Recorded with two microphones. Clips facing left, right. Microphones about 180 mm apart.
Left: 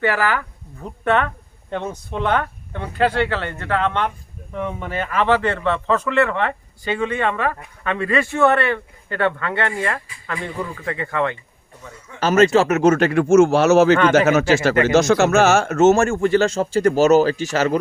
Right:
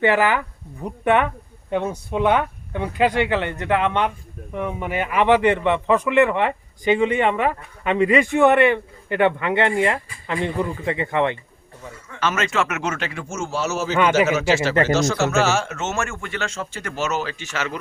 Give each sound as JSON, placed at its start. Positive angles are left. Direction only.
{"t": 0.0, "sound": "a man's voice", "side_deg": -20}
{"t": 12.2, "sound": "speech", "side_deg": 35}
{"t": 14.1, "sound": "speech", "side_deg": 55}
{"t": 14.9, "sound": "a man's voice", "side_deg": 60}